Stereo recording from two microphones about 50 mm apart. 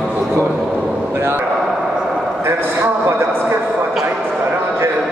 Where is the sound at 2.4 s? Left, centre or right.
Right.